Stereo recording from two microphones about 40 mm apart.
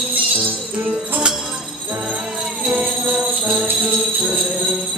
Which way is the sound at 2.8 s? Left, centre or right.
Right.